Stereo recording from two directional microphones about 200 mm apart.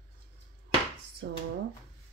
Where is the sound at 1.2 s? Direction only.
60° right (ahead or behind).